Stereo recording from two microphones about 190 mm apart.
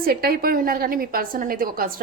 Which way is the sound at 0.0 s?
50° right (ahead or behind).